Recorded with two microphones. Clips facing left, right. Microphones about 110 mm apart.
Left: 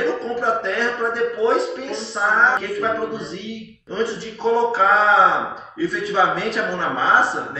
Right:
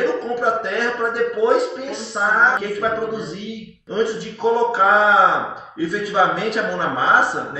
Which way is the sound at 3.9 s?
Centre (ahead or behind).